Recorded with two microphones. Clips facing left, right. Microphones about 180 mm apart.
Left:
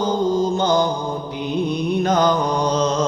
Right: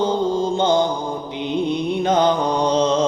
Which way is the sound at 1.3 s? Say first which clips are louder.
Right 2 dB; 25° right (ahead or behind).